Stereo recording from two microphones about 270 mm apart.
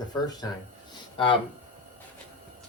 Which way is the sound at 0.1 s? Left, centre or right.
Centre.